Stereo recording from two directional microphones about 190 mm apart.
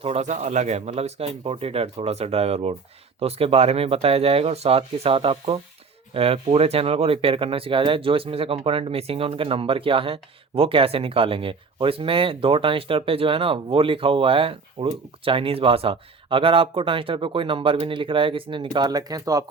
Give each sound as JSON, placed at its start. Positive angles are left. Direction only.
{"t": 0.0, "sound": "speech", "side_deg": -35}